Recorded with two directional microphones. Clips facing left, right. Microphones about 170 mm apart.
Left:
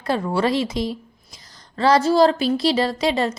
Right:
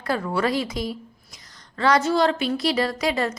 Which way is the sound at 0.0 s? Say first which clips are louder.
Left 3 dB; 25° left (ahead or behind).